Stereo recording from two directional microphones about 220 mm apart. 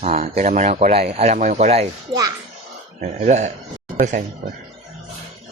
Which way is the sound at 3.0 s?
30° right (ahead or behind).